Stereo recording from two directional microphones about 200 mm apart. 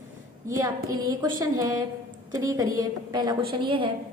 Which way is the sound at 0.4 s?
15° right (ahead or behind).